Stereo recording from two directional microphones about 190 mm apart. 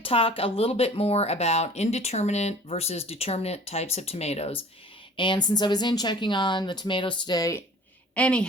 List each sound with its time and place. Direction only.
0.0 s speech: 30° left (ahead or behind)
8.1 s a woman's voice: 5° left (ahead or behind)